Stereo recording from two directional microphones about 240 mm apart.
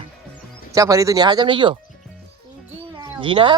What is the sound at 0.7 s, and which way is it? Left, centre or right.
Speech, centre.